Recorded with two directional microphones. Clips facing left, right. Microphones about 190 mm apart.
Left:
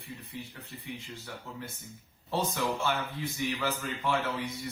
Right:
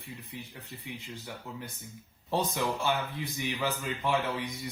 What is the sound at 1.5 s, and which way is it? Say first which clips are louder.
Speech: even; 15° right (ahead or behind).